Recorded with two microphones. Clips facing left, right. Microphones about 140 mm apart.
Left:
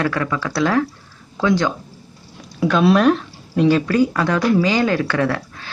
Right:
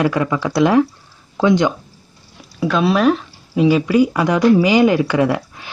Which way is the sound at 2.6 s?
Centre (ahead or behind).